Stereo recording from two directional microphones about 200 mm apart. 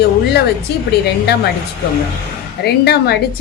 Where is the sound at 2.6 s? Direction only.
55° left (ahead or behind).